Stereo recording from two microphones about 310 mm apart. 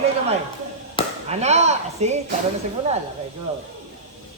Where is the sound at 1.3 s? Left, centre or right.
Right.